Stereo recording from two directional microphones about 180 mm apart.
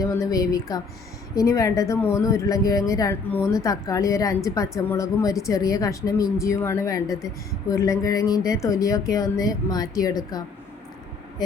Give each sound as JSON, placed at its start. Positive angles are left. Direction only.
{"t": 0.0, "sound": "a woman's voice", "side_deg": 20}